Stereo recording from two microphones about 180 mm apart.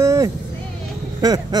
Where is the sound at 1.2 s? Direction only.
20° right (ahead or behind).